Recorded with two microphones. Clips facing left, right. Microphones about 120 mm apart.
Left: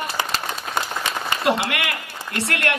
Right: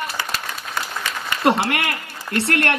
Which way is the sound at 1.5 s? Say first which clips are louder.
Right 4 dB; 35° right (ahead or behind).